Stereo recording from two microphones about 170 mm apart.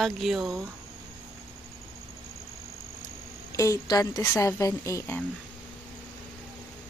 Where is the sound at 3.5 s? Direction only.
20° left (ahead or behind).